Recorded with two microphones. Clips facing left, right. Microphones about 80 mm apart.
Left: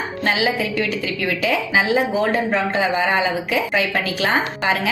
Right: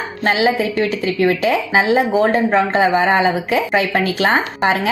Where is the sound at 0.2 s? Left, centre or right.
Right.